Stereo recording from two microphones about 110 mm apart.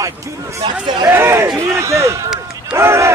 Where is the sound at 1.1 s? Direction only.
20° right (ahead or behind).